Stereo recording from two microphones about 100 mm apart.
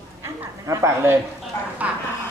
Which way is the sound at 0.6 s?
30° right (ahead or behind).